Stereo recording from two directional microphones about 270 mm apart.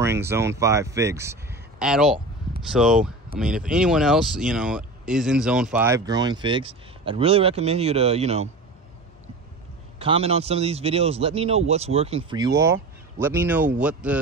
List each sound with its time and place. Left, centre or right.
0.0 s speech: centre
9.9 s a man's voice: right; by 14.1 s centre